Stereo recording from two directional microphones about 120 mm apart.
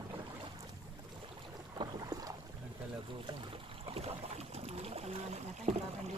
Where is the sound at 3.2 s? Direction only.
50° right (ahead or behind).